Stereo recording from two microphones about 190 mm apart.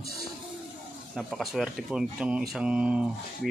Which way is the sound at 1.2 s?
Centre (ahead or behind).